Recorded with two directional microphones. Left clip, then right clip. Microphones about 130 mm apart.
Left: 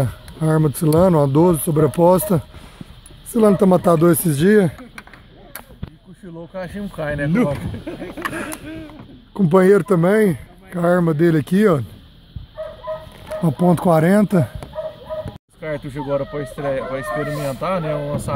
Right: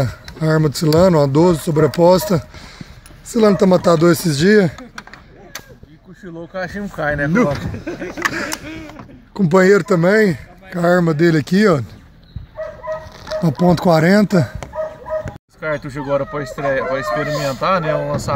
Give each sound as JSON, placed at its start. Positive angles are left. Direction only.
{"t": 0.0, "sound": "speech", "side_deg": 5}
{"t": 6.5, "sound": "speech", "side_deg": 10}
{"t": 7.4, "sound": "speech", "side_deg": 0}
{"t": 8.5, "sound": "speech", "side_deg": -30}
{"t": 9.3, "sound": "speech", "side_deg": 10}
{"t": 13.4, "sound": "speech", "side_deg": 0}
{"t": 15.6, "sound": "speech", "side_deg": 15}
{"t": 17.0, "sound": "speech", "side_deg": -40}
{"t": 17.5, "sound": "speech", "side_deg": 5}